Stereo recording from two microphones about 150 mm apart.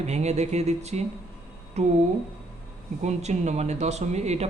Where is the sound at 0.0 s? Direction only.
50° right (ahead or behind).